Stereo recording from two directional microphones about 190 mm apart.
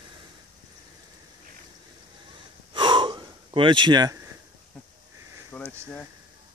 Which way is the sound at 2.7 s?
25° right (ahead or behind).